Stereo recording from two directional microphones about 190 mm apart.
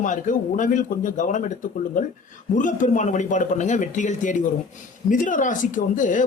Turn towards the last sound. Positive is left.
turn(degrees=40)  # may be behind; listen again after turning